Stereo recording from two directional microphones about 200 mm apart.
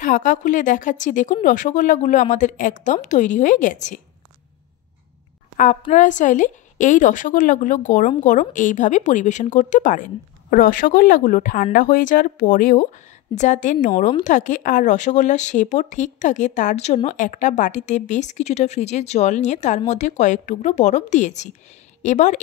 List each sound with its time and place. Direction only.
0.0 s speech: 40° left (ahead or behind)
5.6 s speech: 40° left (ahead or behind)